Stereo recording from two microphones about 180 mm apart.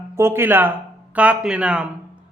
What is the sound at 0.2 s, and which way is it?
Speech, 15° right (ahead or behind).